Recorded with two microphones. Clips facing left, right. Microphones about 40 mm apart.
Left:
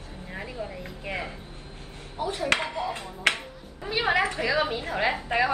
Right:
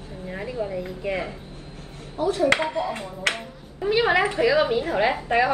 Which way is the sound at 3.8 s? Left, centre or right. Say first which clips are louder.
Right 8 dB; right.